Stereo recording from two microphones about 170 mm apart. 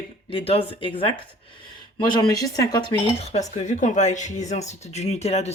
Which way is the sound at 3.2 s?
40° left (ahead or behind).